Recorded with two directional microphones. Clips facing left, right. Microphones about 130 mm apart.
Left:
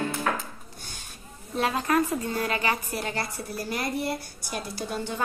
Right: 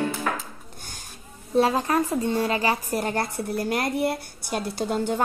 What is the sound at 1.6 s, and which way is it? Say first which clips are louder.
A woman's voice: right 3 dB; 30° right (ahead or behind).